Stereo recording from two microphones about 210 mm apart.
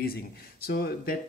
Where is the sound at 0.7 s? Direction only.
45° left (ahead or behind).